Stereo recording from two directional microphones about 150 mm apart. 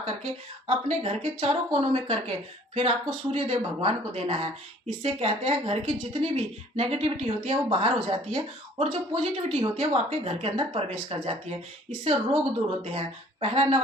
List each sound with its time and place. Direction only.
0.0 s speech: 40° right (ahead or behind)